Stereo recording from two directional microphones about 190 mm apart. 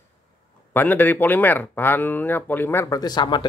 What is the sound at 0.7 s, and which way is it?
Speech, 10° left (ahead or behind).